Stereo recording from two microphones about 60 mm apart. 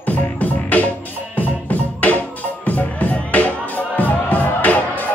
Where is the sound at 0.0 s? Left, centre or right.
Left.